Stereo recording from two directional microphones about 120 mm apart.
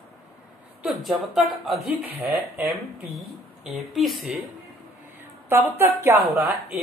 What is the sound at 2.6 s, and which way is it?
Speech, 15° right (ahead or behind).